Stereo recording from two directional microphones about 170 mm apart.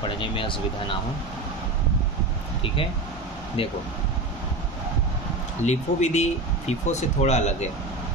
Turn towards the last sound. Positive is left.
turn(degrees=40)  # may be behind; listen again after turning